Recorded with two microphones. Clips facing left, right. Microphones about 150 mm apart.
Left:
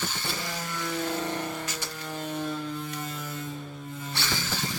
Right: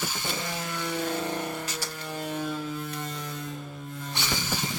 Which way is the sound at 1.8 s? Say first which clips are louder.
Right 1 dB; 10° right (ahead or behind).